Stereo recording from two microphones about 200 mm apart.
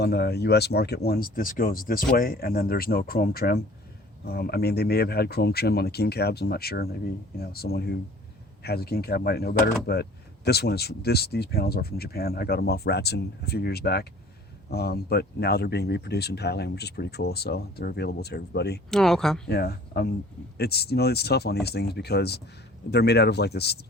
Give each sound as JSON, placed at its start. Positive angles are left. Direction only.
{"t": 0.0, "sound": "speech", "side_deg": 55}
{"t": 18.9, "sound": "speech", "side_deg": 0}
{"t": 19.5, "sound": "speech", "side_deg": 50}